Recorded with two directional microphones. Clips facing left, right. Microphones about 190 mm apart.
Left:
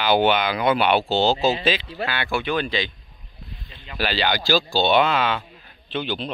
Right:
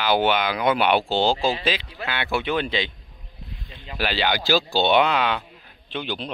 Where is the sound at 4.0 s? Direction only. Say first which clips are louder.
Left 1 dB; 15° right (ahead or behind).